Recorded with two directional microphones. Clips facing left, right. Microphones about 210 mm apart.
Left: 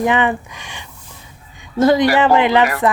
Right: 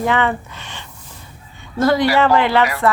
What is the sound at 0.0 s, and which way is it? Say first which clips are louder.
A woman's voice: left 2 dB; 15° left (ahead or behind).